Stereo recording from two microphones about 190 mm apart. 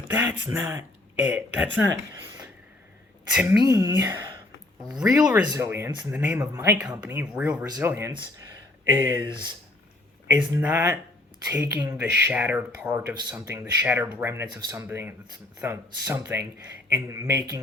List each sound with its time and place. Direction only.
0.3 s speech: 10° right (ahead or behind)
3.3 s speech: 5° right (ahead or behind)
3.7 s speech: 15° right (ahead or behind)
4.9 s speech: 5° right (ahead or behind); by 9.5 s 20° right (ahead or behind)
10.6 s speech: 15° right (ahead or behind)